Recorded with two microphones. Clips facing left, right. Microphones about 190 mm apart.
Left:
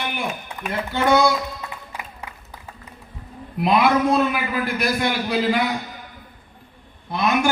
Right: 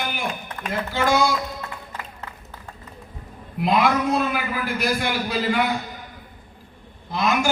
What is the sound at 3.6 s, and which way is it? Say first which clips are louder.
A man's voice: left 2 dB; 65° left (ahead or behind).